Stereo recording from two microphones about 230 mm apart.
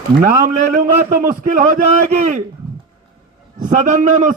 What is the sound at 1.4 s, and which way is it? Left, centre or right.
Speech, right.